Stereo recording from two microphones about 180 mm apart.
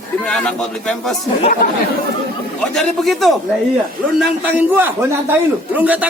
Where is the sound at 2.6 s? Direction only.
5° left (ahead or behind).